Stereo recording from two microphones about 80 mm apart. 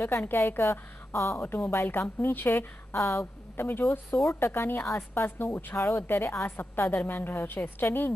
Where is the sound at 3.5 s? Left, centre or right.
Left.